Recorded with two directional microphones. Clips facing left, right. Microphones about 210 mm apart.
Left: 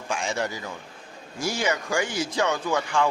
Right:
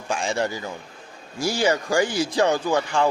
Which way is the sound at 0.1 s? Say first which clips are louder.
Right 4 dB; 35° right (ahead or behind).